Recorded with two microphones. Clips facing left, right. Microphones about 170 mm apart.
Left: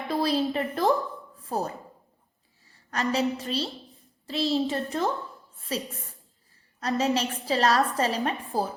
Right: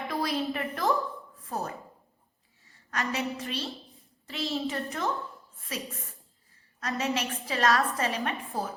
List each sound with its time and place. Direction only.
0.1 s a woman's voice: 35° left (ahead or behind)
2.9 s a woman's voice: 35° left (ahead or behind)